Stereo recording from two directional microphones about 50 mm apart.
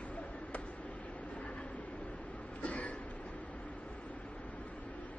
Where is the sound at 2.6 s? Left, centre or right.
Left.